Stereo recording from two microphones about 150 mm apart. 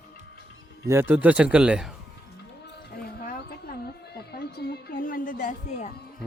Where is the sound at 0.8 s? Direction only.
15° right (ahead or behind).